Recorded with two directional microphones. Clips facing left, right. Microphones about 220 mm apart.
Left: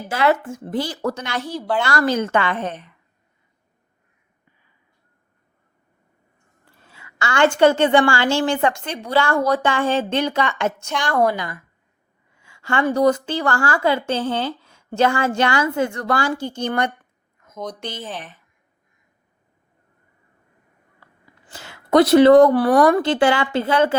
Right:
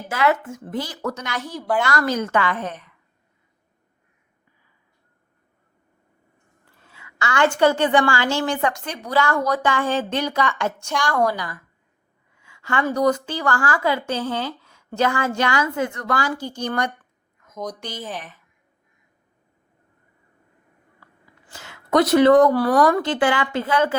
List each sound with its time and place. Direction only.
0.1 s a woman's voice: 30° left (ahead or behind)
6.8 s a woman's voice: 30° left (ahead or behind)
21.5 s a sound: 30° left (ahead or behind)
22.1 s a woman's voice: 30° left (ahead or behind)